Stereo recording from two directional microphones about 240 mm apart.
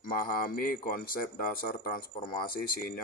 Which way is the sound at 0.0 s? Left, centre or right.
Left.